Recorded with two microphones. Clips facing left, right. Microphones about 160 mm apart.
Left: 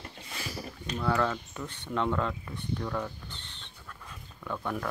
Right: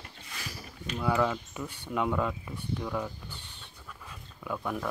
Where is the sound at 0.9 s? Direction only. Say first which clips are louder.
Right 1 dB; 10° right (ahead or behind).